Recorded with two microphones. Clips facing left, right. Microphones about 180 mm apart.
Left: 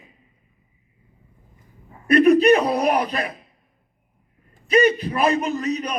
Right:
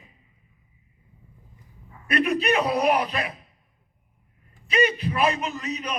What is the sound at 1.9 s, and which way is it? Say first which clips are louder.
A man's voice: left 10 dB; 40° left (ahead or behind).